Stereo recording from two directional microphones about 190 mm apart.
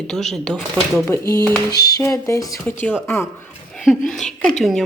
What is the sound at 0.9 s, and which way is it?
Speech, 15° left (ahead or behind).